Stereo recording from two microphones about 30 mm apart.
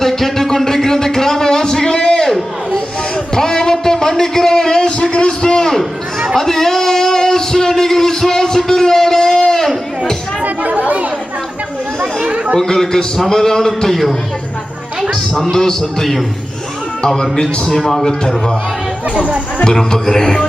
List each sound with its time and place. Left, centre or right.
0.0 s a sound: centre; by 2.2 s left
3.3 s a sound: left
5.0 s a sound: left
6.3 s a sound: centre
10.4 s chatter: right
12.2 s chatter: right
12.5 s a man's voice: centre
15.5 s a man's voice: centre
17.3 s speech: left
17.7 s a man's voice: centre
18.0 s speech: centre
19.6 s speech: centre